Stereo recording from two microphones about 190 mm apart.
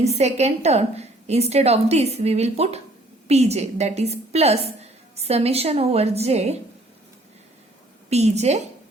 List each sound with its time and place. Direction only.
0.0 s a woman's voice: 35° right (ahead or behind)
8.1 s a woman's voice: 35° right (ahead or behind)